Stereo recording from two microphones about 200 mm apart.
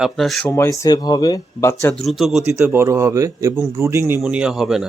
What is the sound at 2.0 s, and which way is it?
Speech, centre (ahead or behind).